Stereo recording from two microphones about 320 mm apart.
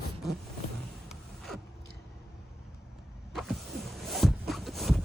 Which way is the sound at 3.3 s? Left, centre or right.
Centre.